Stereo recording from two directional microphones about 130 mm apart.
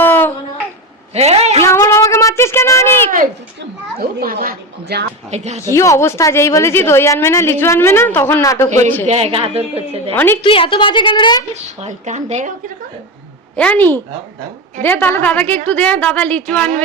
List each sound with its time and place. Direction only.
0.0 s a sound: 15° left (ahead or behind)
1.1 s a sound: 55° right (ahead or behind)
1.6 s a sound: 20° left (ahead or behind)
4.2 s a woman's voice: 90° right
5.3 s speech: 60° right (ahead or behind)
5.6 s a woman's voice: 25° left (ahead or behind)
9.0 s a woman's voice: 55° right (ahead or behind)
10.4 s a woman's voice: 40° left (ahead or behind)
11.5 s speech: 60° right (ahead or behind)
13.6 s a woman's voice: 10° left (ahead or behind)